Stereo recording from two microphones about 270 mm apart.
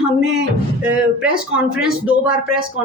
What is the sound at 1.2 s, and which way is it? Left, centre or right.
Speech, centre.